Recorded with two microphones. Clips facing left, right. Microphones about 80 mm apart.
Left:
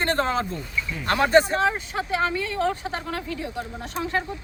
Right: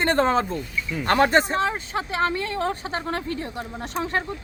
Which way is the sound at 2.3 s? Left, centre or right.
Right.